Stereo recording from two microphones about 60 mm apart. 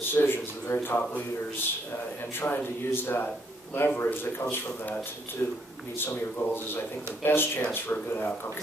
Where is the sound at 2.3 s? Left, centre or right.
Left.